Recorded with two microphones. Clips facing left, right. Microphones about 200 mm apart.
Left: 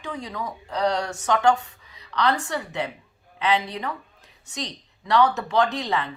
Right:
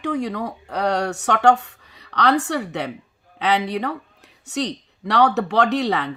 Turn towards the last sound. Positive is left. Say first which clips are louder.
# right 4 dB
turn(degrees=-70)  # may be behind; listen again after turning